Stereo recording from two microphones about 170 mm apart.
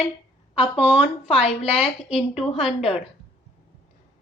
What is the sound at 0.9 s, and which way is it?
A woman's voice, 35° left (ahead or behind).